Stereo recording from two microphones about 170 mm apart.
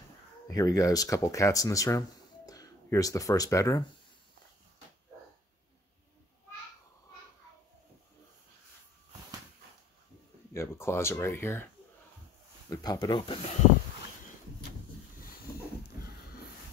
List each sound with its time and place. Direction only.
0.5 s speech: 20° left (ahead or behind)
10.5 s speech: 15° left (ahead or behind)
12.6 s speech: 20° left (ahead or behind)